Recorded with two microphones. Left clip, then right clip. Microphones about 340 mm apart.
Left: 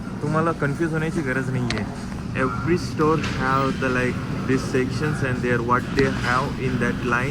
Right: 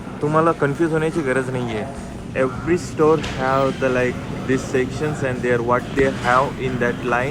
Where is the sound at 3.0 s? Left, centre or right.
Right.